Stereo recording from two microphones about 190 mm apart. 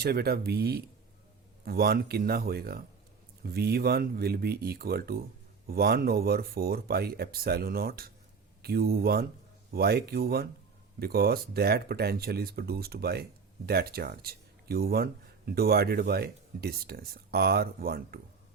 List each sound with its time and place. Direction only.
0.0 s speech: 55° right (ahead or behind)